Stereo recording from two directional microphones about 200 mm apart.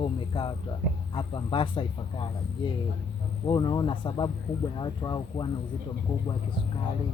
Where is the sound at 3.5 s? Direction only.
20° left (ahead or behind).